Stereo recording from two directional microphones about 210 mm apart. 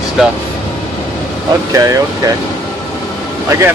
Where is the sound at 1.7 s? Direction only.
15° right (ahead or behind).